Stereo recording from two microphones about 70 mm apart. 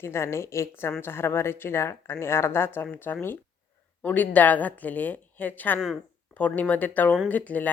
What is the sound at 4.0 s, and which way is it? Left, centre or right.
Speech, left.